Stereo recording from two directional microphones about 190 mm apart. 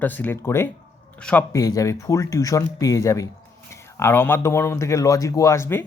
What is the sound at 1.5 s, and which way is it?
Speech, 20° left (ahead or behind).